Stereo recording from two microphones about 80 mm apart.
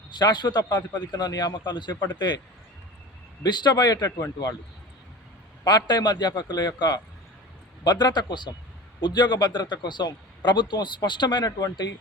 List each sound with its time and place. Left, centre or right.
0.1 s a man's voice: left
3.4 s a man's voice: left
5.6 s a man's voice: left